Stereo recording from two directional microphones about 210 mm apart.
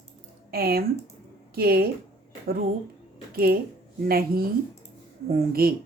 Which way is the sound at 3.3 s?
45° right (ahead or behind).